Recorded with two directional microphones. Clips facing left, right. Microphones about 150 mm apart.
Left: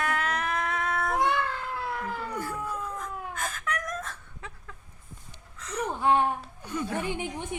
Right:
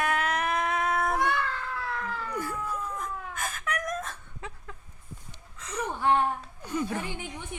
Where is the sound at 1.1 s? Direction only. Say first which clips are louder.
Left 1 dB; 20° left (ahead or behind).